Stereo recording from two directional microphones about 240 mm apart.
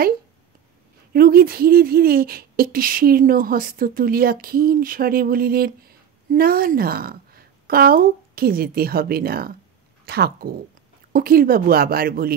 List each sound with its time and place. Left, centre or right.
1.1 s a woman's voice: right